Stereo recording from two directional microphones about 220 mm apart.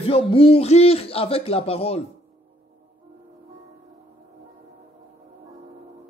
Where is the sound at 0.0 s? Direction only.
25° left (ahead or behind).